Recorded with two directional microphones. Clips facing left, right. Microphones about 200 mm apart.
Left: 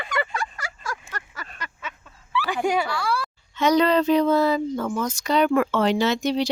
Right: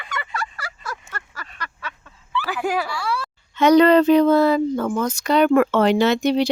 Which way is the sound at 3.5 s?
60° right (ahead or behind).